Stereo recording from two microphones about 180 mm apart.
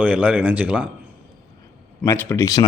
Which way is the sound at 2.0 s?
15° left (ahead or behind).